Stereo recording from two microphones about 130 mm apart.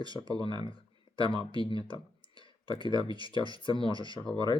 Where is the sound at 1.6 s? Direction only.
40° left (ahead or behind).